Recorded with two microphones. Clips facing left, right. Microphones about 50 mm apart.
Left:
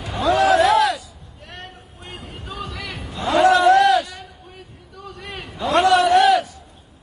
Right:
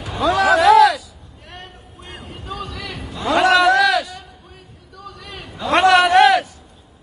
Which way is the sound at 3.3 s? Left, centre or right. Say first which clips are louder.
Left 1 dB; right.